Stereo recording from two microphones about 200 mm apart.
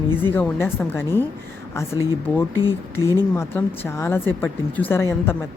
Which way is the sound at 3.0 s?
15° right (ahead or behind).